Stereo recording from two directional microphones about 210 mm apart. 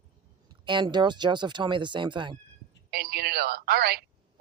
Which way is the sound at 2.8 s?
50° right (ahead or behind).